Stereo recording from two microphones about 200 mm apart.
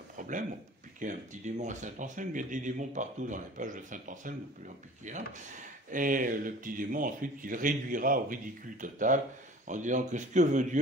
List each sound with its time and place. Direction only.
1.0 s speech: 40° right (ahead or behind)